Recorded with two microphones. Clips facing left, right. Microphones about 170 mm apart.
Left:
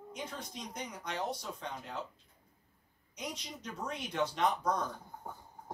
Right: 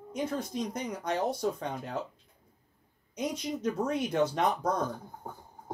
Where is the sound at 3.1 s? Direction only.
50° right (ahead or behind).